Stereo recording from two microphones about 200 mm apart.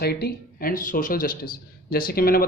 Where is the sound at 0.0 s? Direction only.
50° left (ahead or behind).